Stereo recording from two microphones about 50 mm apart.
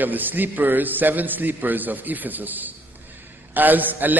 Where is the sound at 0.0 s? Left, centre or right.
Right.